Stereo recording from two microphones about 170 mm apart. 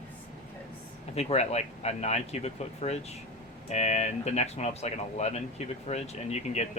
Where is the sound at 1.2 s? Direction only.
40° left (ahead or behind).